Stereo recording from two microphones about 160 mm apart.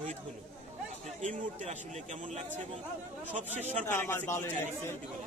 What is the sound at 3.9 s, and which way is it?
Speech, 15° left (ahead or behind).